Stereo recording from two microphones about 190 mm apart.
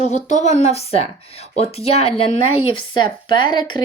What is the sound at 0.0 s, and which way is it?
Speech, 35° left (ahead or behind).